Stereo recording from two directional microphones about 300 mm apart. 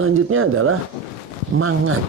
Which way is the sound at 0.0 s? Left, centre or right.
Right.